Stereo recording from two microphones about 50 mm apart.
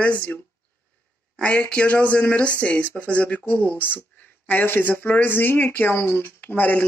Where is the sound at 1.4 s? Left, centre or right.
Left.